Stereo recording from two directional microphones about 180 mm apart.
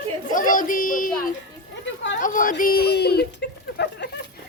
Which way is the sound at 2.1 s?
45° left (ahead or behind).